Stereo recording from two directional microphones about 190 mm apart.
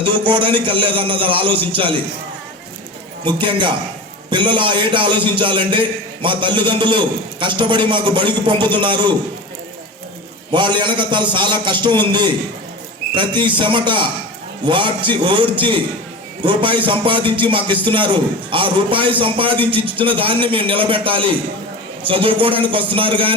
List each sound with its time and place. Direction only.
0.3 s a man's voice: 25° right (ahead or behind)
3.2 s a man's voice: 25° right (ahead or behind)
10.5 s a man's voice: 25° right (ahead or behind)